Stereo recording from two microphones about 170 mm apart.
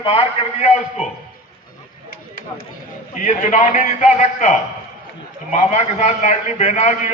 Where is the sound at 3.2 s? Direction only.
45° left (ahead or behind).